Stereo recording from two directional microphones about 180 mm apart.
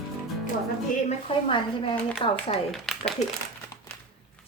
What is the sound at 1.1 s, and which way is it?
A woman's voice, 30° left (ahead or behind).